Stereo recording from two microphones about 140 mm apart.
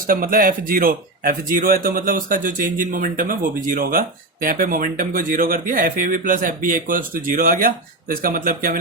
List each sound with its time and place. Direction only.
0.1 s speech: 90° right; by 3.3 s 75° right (ahead or behind)
3.8 s speech: 90° right